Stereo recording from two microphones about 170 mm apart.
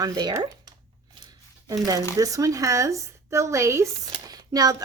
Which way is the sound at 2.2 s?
20° right (ahead or behind).